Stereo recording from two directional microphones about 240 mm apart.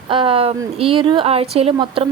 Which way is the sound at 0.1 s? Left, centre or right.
Right.